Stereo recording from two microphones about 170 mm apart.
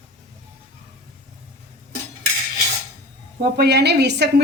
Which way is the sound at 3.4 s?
75° right (ahead or behind).